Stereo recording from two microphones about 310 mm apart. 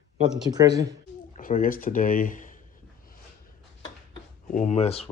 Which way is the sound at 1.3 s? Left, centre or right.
Left.